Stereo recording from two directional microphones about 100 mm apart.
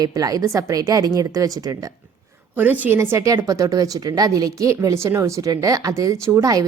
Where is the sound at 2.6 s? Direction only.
15° right (ahead or behind).